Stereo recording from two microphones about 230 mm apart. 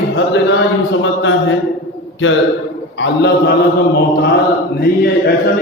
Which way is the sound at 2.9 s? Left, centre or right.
Left.